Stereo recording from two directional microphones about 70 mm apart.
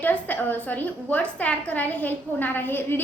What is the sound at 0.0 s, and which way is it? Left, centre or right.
A woman's voice, left.